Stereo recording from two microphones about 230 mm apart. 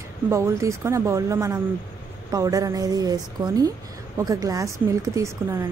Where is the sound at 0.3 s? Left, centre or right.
Centre.